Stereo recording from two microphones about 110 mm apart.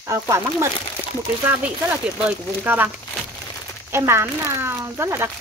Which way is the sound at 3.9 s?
25° right (ahead or behind).